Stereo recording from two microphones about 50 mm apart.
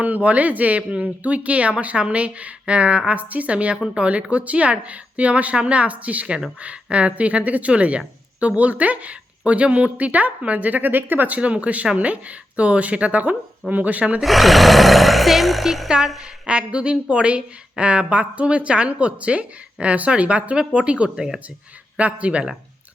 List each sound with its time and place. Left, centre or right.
0.0 s a woman's voice: right
11.3 s a woman's voice: right
14.2 s speech: centre
16.5 s a woman's voice: right